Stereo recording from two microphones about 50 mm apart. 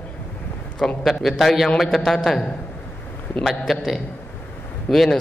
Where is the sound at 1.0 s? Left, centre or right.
Centre.